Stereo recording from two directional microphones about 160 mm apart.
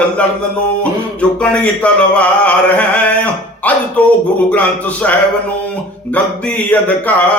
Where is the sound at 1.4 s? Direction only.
5° left (ahead or behind).